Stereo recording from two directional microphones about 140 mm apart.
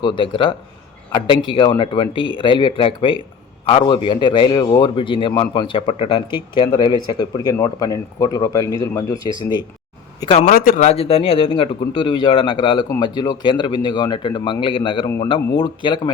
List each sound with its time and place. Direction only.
0.0 s a man's voice: 40° left (ahead or behind)
10.4 s speech: 85° left
10.8 s a man's voice: 45° left (ahead or behind)